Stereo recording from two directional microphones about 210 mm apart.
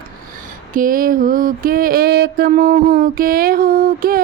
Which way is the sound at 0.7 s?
40° right (ahead or behind).